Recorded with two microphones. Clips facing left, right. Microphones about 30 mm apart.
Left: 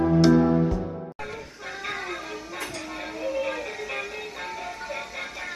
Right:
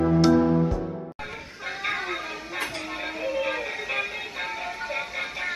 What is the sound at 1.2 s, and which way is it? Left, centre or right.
Music, right.